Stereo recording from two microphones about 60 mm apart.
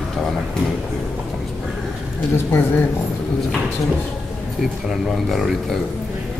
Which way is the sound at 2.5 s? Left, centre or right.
Left.